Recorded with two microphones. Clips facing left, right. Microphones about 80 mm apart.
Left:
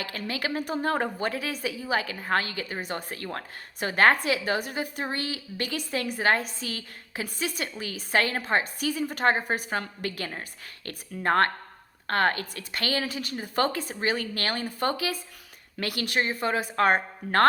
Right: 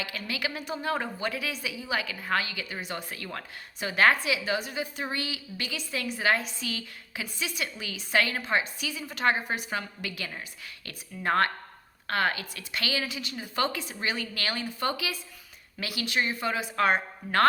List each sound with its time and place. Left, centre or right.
0.0 s a woman's voice: left
15.8 s a woman's voice: left